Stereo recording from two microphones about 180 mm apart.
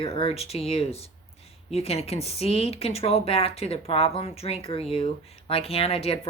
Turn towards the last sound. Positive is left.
turn(degrees=35)  # may be behind; listen again after turning